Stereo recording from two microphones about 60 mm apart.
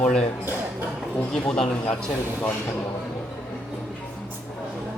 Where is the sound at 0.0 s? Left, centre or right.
Centre.